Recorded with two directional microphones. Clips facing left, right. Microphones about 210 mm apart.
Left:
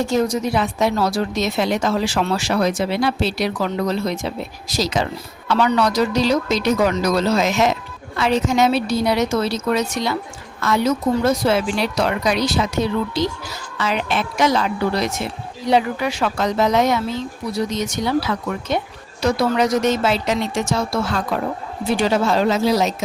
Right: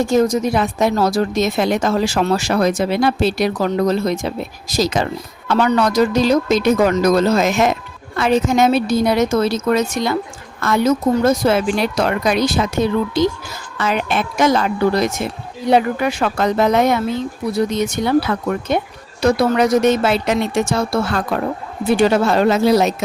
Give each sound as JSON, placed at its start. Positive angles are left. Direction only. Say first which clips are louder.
{"t": 0.1, "sound": "speech", "louder": "right 4 dB", "side_deg": -45}